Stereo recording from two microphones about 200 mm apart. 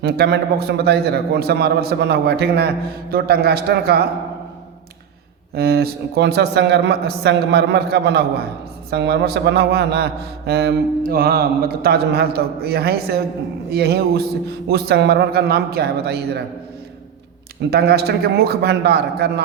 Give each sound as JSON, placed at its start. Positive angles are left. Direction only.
{"t": 0.0, "sound": "a man's voice", "side_deg": -50}
{"t": 5.5, "sound": "a man's voice", "side_deg": -50}
{"t": 17.7, "sound": "a man's voice", "side_deg": -50}